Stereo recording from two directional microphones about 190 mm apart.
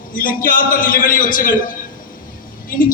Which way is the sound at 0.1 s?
45° left (ahead or behind).